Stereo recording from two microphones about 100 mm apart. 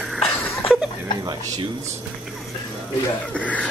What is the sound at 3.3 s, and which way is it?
Speech, 15° left (ahead or behind).